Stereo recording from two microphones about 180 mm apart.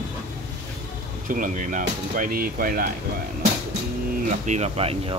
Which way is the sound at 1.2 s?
50° right (ahead or behind).